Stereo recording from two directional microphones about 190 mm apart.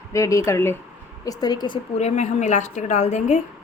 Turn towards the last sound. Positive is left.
turn(degrees=35)  # may be behind; listen again after turning